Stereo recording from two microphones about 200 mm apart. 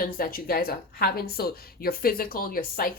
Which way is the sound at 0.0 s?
45° left (ahead or behind).